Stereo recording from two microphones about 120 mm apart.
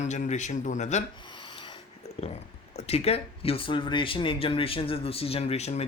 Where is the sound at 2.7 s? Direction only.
60° left (ahead or behind).